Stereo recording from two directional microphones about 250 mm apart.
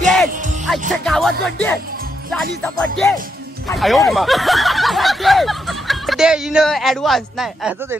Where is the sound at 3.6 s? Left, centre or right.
Centre.